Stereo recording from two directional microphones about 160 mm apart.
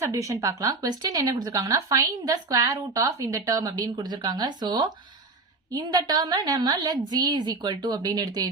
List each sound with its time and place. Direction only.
0.0 s speech: 20° right (ahead or behind)